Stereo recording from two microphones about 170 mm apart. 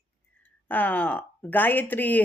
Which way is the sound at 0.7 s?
10° left (ahead or behind).